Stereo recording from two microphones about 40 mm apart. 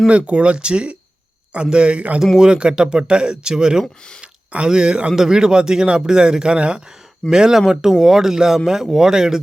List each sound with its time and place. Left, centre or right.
0.1 s speech: right
5.1 s speech: centre
7.3 s speech: centre